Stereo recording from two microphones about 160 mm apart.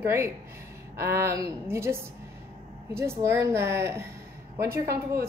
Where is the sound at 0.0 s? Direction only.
15° right (ahead or behind).